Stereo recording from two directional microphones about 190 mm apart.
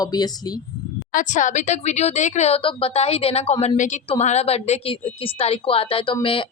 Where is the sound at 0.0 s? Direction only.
20° left (ahead or behind).